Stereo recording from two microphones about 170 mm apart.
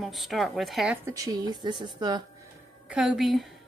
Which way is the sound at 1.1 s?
20° right (ahead or behind).